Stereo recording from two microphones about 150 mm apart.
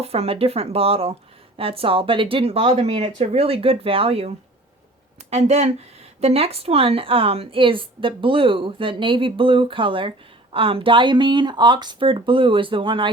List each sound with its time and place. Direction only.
0.0 s a woman's voice: 40° right (ahead or behind)